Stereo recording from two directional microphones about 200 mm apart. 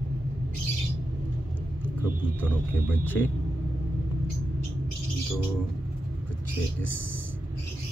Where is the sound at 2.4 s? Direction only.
10° left (ahead or behind).